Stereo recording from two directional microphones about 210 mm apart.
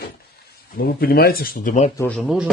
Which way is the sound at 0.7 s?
45° left (ahead or behind).